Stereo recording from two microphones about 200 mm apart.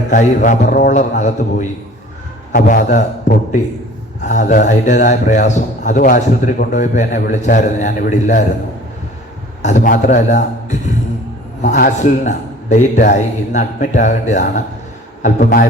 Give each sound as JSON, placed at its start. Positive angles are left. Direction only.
{"t": 0.1, "sound": "a man's voice", "side_deg": 40}
{"t": 9.6, "sound": "a man's voice", "side_deg": 40}